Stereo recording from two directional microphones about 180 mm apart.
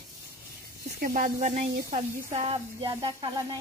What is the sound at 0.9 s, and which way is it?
Speech, 50° right (ahead or behind).